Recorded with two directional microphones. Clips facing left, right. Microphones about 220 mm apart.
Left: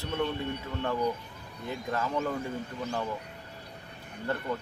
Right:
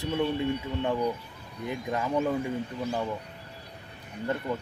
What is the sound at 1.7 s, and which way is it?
Speech, 15° right (ahead or behind).